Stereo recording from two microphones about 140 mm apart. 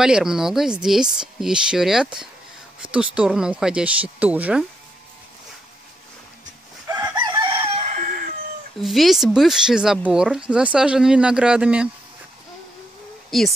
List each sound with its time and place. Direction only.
0.0 s speech: 5° right (ahead or behind)
6.9 s chicken: 30° right (ahead or behind)
8.7 s speech: centre (ahead or behind)
13.3 s speech: centre (ahead or behind)